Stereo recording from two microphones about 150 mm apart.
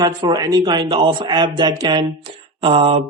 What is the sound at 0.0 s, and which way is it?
A man's voice, 30° right (ahead or behind).